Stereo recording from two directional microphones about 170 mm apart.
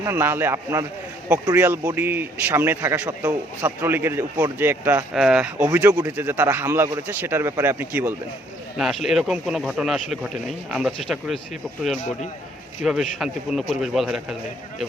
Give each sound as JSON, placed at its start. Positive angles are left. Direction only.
{"t": 0.0, "sound": "a man's voice", "side_deg": -15}
{"t": 5.6, "sound": "a man's voice", "side_deg": -15}
{"t": 8.8, "sound": "speech", "side_deg": 0}
{"t": 12.8, "sound": "speech", "side_deg": 0}